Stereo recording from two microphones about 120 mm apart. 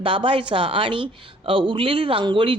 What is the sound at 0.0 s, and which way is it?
A woman's voice, 45° right (ahead or behind).